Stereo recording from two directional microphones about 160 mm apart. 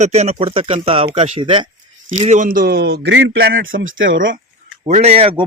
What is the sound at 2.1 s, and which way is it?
A man's voice, 45° right (ahead or behind).